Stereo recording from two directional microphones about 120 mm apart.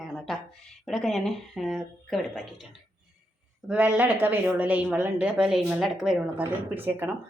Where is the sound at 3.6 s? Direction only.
10° right (ahead or behind).